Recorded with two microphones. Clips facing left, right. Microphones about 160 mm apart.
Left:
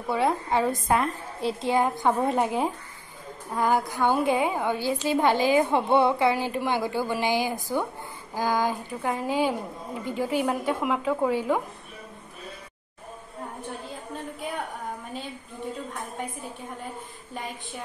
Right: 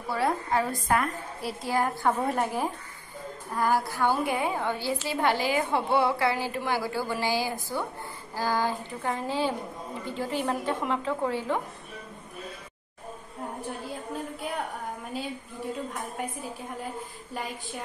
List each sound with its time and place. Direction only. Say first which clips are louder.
0.1 s a woman's voice: left 3 dB; 20° left (ahead or behind)